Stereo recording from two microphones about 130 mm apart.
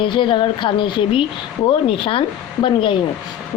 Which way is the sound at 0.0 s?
40° left (ahead or behind).